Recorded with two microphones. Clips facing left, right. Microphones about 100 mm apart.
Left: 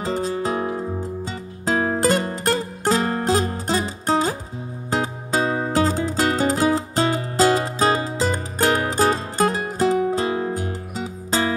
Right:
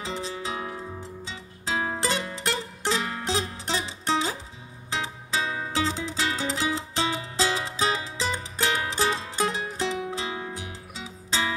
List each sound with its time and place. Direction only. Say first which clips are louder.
0.0 s music: left 9 dB; 45° left (ahead or behind)